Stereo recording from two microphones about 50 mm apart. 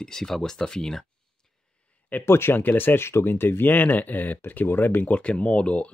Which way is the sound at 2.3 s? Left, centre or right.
Left.